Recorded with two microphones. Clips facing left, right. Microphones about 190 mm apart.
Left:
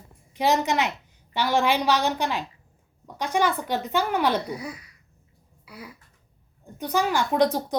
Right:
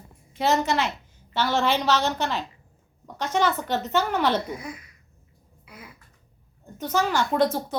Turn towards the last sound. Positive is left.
turn(degrees=15)  # may be behind; listen again after turning